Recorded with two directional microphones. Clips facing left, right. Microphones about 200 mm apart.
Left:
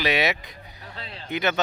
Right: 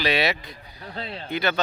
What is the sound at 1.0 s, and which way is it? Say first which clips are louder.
Speech: right 7 dB; 35° right (ahead or behind).